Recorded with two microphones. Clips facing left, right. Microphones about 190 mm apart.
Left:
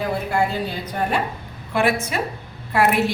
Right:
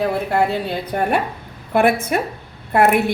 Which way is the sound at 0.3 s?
65° right (ahead or behind).